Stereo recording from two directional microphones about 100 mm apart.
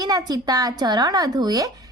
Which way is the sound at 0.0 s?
40° right (ahead or behind).